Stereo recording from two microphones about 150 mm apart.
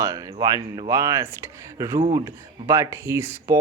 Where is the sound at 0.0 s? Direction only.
25° right (ahead or behind).